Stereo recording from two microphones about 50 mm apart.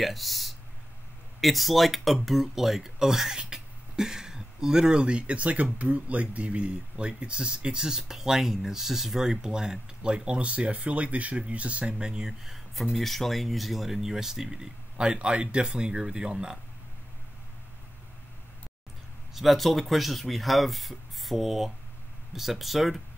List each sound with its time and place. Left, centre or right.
0.0 s speech: centre; by 11.9 s right
12.0 s speech: centre
19.3 s speech: centre